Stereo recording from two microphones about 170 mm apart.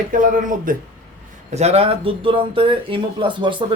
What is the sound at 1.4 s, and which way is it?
Speech, 40° right (ahead or behind).